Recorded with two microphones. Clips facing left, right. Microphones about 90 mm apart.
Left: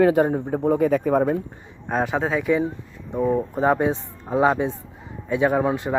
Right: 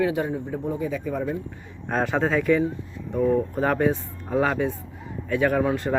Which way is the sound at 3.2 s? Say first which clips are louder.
Left 3 dB; 20° left (ahead or behind).